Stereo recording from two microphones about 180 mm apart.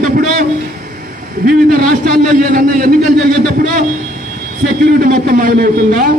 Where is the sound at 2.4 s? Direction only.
50° right (ahead or behind).